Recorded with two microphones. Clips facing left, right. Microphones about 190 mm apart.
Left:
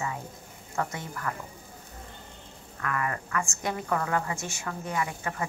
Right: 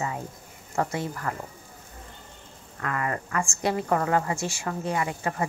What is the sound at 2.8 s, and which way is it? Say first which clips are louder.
A woman's voice: right 2 dB; 30° right (ahead or behind).